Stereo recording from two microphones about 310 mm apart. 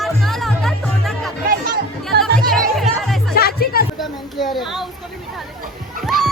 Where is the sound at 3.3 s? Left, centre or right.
Left.